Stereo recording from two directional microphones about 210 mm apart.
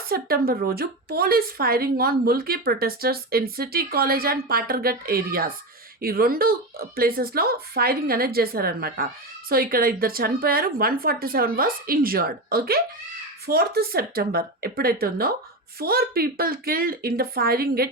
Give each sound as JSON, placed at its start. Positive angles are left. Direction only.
{"t": 0.1, "sound": "a woman's voice", "side_deg": -45}